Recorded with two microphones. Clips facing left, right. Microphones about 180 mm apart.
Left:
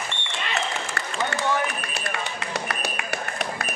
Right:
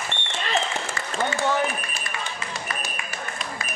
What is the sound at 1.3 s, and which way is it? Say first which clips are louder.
Run: right 1 dB; 65° left (ahead or behind).